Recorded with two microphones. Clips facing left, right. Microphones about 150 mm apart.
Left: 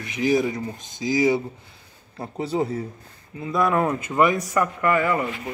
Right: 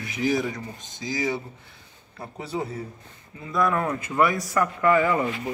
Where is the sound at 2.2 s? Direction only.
25° left (ahead or behind).